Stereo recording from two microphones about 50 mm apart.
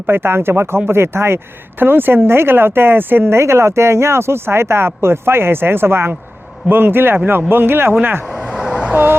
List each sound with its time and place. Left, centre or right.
0.1 s speech: right
1.8 s speech: right
8.5 s vehicle: centre
8.9 s vehicle: right